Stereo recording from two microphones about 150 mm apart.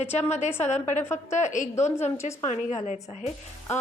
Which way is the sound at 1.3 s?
55° left (ahead or behind).